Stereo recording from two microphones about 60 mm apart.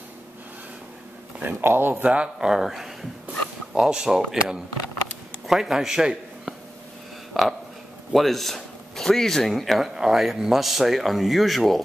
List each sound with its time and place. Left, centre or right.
1.6 s speech: right
2.0 s a man's voice: centre